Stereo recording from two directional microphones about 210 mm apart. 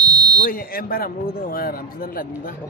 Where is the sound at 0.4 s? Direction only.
45° left (ahead or behind).